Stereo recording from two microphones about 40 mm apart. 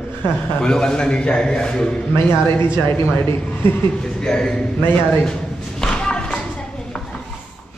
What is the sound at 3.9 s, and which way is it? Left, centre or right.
A man's voice, centre.